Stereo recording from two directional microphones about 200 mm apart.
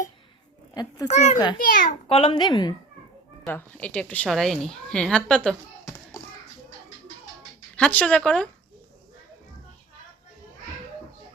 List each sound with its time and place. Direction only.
0.7 s a child's voice: 20° left (ahead or behind)
1.0 s a child's voice: 35° left (ahead or behind)
1.6 s a child's voice: 45° left (ahead or behind)
2.0 s speech: 30° left (ahead or behind)
3.4 s a woman's voice: 5° left (ahead or behind)
7.8 s speech: 5° left (ahead or behind)